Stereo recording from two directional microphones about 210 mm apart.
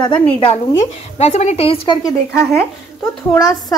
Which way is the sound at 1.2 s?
30° left (ahead or behind).